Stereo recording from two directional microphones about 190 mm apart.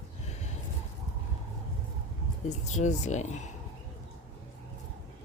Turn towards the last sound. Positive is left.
turn(degrees=40)  # may be behind; listen again after turning